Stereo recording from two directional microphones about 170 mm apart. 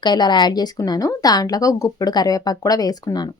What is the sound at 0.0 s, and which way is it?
A woman's voice, 25° left (ahead or behind).